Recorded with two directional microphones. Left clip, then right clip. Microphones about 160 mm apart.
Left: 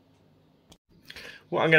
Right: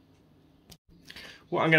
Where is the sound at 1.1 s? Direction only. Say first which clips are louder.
Left 1 dB; 30° left (ahead or behind).